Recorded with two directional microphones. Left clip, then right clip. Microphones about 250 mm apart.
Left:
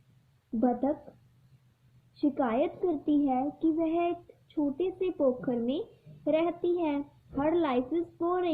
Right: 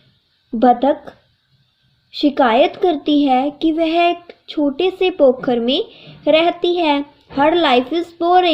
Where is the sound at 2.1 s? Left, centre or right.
Centre.